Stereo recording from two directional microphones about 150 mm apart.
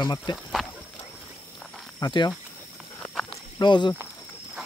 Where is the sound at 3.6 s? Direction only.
30° left (ahead or behind).